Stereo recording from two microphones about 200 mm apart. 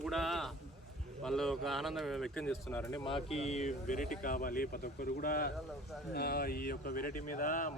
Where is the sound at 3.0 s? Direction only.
30° left (ahead or behind).